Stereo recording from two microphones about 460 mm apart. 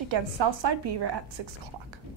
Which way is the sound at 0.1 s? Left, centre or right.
Right.